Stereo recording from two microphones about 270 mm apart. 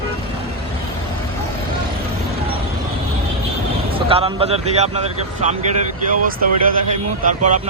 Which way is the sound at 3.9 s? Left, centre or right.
Right.